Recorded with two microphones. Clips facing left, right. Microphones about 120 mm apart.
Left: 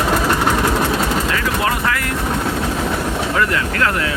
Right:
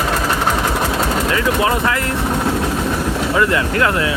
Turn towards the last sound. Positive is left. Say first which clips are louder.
# right 2 dB
turn(degrees=-20)  # may be behind; listen again after turning